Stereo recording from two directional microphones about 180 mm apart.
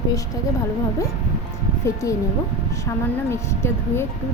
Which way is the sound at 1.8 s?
15° left (ahead or behind).